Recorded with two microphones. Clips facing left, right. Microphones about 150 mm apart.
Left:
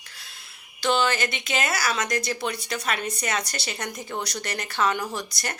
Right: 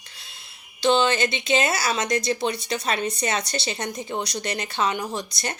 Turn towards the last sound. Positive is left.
turn(degrees=-20)  # may be behind; listen again after turning